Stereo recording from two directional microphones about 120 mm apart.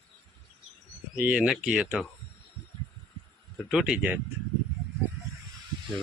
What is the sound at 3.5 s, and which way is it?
Speech, 5° right (ahead or behind).